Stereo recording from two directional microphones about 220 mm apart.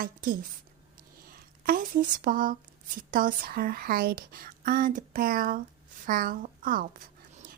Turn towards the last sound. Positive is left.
turn(degrees=-40)  # may be behind; listen again after turning